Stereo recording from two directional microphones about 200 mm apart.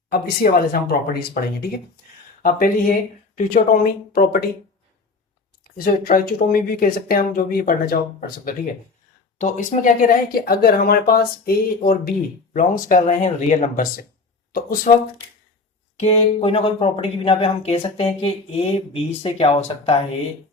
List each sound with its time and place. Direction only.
0.1 s speech: 50° left (ahead or behind)
5.6 s speech: 45° left (ahead or behind)
9.4 s speech: 40° left (ahead or behind)
16.0 s speech: 35° left (ahead or behind)